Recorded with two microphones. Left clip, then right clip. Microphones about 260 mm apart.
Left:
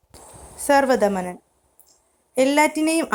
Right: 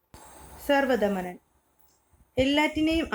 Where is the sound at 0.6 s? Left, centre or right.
Centre.